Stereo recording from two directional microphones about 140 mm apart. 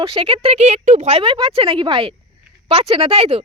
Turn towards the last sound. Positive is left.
turn(degrees=-45)  # may be behind; listen again after turning